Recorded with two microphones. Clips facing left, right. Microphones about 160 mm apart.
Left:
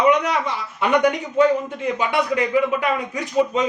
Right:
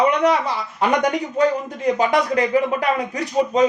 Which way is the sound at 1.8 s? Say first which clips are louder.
Right 7 dB; 40° right (ahead or behind).